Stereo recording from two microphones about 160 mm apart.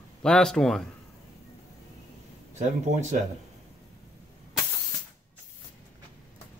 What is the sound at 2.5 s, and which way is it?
Speech, 45° right (ahead or behind).